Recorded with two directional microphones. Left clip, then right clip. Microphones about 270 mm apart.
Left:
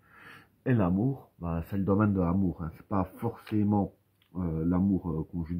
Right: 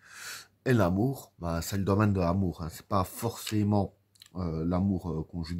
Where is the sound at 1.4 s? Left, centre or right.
Right.